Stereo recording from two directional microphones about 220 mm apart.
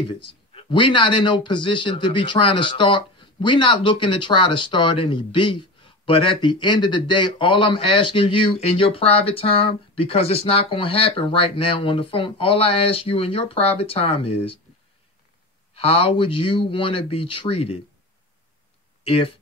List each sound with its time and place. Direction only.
0.6 s speech: 20° left (ahead or behind)
15.7 s speech: 25° left (ahead or behind)
19.0 s speech: 25° left (ahead or behind)